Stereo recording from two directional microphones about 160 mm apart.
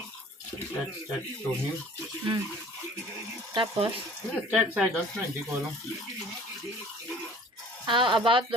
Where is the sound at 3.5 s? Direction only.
30° right (ahead or behind).